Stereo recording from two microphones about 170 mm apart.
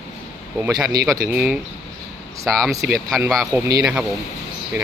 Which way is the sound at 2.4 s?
5° left (ahead or behind).